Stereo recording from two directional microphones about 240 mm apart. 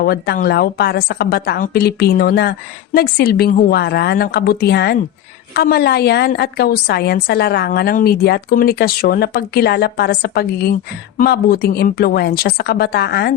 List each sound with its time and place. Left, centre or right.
0.0 s a woman's voice: left